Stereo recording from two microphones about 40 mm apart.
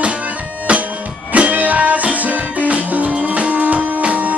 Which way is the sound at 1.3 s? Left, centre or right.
Right.